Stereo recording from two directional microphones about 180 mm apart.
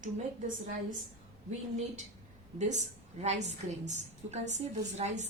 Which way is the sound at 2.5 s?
40° right (ahead or behind).